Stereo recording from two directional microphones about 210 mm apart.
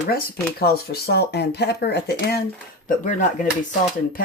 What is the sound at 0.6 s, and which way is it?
Speech, 50° left (ahead or behind).